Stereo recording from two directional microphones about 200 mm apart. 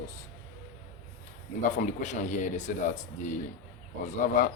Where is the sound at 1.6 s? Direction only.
40° left (ahead or behind).